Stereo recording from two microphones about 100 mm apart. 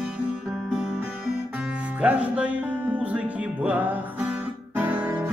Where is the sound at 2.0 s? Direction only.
10° right (ahead or behind).